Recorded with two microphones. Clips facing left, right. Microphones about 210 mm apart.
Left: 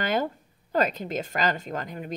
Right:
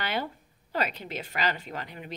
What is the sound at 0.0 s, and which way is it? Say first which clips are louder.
Speech: left 6 dB; 45° left (ahead or behind).